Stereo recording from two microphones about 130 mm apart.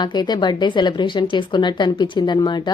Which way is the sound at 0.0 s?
35° left (ahead or behind).